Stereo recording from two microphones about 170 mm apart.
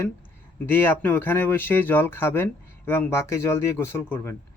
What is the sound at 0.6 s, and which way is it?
Speech, 10° left (ahead or behind).